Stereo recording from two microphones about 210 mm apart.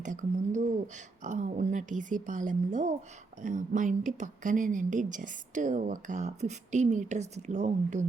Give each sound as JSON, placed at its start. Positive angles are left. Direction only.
{"t": 0.0, "sound": "speech", "side_deg": -35}